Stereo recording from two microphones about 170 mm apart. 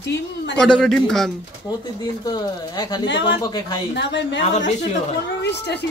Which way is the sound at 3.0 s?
90° left.